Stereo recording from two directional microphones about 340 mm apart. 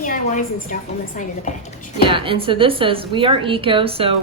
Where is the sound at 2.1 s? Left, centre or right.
Centre.